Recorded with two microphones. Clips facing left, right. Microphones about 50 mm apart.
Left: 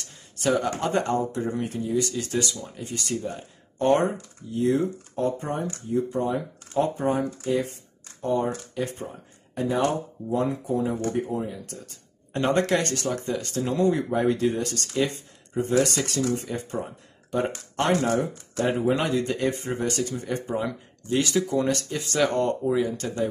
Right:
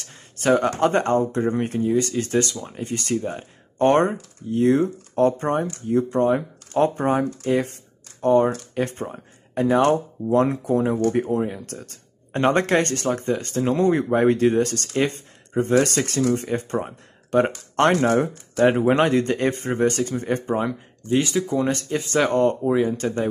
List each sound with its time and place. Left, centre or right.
0.0 s speech: right
12.3 s speech: right
20.6 s speech: right